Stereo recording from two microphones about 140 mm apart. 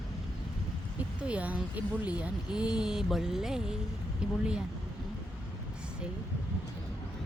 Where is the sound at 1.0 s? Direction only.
10° right (ahead or behind).